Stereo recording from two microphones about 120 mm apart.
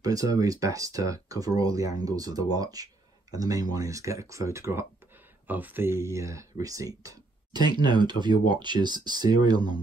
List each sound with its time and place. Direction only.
0.0 s speech: 30° right (ahead or behind)